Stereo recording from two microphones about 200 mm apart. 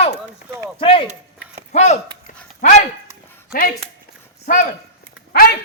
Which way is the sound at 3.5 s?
45° left (ahead or behind).